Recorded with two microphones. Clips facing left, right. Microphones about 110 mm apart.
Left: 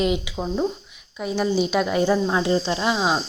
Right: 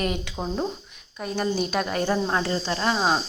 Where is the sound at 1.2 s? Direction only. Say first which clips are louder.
Left 4 dB; 15° left (ahead or behind).